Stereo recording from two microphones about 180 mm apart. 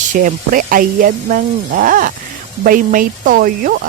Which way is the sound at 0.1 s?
50° right (ahead or behind).